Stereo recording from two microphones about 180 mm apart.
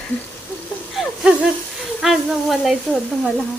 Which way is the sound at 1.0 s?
Centre (ahead or behind).